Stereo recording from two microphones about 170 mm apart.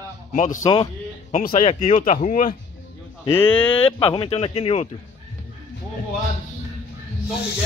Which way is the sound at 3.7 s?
35° left (ahead or behind).